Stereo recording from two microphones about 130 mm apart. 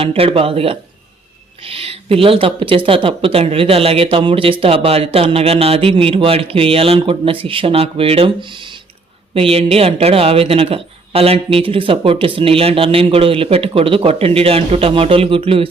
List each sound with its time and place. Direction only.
0.0 s speech: 45° right (ahead or behind)